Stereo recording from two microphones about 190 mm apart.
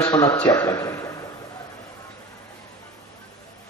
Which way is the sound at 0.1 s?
15° left (ahead or behind).